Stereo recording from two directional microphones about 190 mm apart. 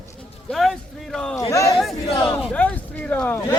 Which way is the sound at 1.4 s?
15° left (ahead or behind).